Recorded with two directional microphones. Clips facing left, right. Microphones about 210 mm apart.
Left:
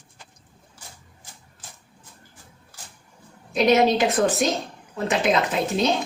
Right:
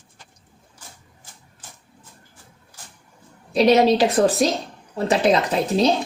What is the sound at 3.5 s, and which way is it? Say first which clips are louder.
A woman's voice: right 3 dB; 35° right (ahead or behind).